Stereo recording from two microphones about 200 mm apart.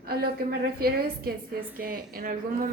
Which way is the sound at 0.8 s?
50° right (ahead or behind).